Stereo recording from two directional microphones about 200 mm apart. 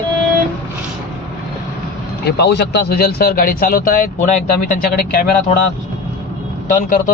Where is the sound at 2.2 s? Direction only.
55° left (ahead or behind).